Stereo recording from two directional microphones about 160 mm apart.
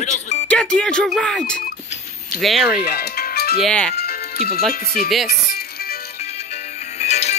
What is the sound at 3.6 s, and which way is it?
Speech, 5° left (ahead or behind).